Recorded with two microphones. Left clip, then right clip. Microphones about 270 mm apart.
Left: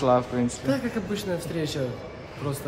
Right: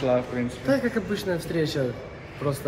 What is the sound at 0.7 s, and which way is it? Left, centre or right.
A man's voice, centre.